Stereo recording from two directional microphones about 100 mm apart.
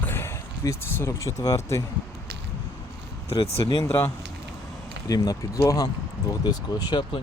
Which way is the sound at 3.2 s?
80° left.